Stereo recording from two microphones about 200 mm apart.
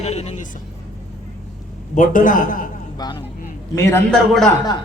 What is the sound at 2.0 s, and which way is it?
Speech, 40° left (ahead or behind).